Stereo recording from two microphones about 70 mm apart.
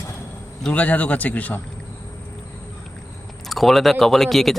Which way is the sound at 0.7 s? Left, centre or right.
Left.